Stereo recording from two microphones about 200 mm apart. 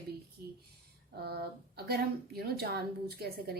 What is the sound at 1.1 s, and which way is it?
Speech, 55° right (ahead or behind).